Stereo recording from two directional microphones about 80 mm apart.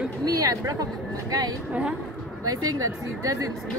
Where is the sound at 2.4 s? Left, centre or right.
Right.